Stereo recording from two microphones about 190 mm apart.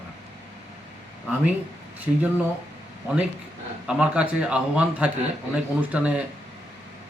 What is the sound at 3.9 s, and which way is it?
A man's voice, 5° right (ahead or behind).